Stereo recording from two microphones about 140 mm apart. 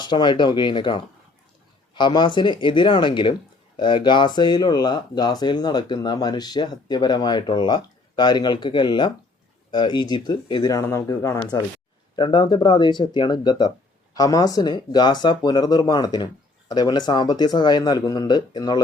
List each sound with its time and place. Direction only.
0.0 s speech: 30° left (ahead or behind)
12.1 s speech: 35° left (ahead or behind)